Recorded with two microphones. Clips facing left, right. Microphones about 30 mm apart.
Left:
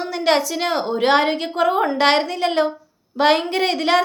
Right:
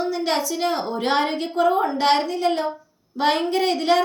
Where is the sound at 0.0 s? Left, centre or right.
Left.